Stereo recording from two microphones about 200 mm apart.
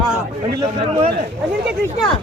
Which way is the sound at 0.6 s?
25° right (ahead or behind).